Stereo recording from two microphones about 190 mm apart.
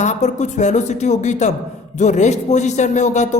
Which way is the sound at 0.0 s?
40° left (ahead or behind).